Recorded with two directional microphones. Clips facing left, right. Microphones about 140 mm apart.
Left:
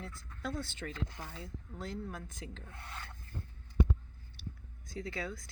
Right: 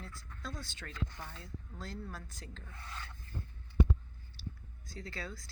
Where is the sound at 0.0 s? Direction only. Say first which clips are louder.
Left 3 dB; 20° left (ahead or behind).